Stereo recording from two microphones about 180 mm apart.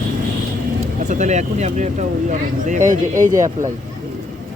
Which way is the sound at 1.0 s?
40° right (ahead or behind).